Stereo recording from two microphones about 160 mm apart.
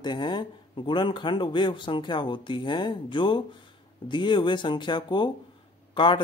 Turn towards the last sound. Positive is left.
turn(degrees=30)  # may be behind; listen again after turning